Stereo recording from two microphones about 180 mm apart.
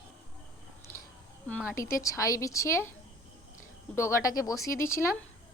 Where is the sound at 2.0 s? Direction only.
15° left (ahead or behind).